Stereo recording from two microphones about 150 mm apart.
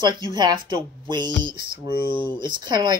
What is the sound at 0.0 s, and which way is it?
Speech, 30° right (ahead or behind).